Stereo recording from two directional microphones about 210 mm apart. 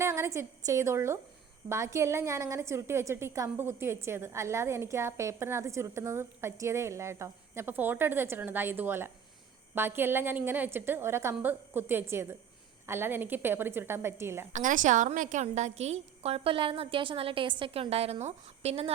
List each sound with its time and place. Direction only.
0.0 s a woman's voice: 15° right (ahead or behind)
14.5 s a woman's voice: 40° right (ahead or behind)